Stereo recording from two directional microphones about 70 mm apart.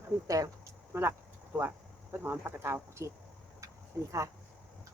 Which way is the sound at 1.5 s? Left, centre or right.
Right.